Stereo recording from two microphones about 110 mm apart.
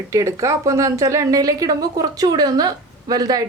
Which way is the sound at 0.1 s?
30° right (ahead or behind).